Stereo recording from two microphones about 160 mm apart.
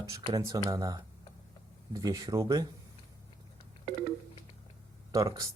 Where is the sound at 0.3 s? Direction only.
25° right (ahead or behind).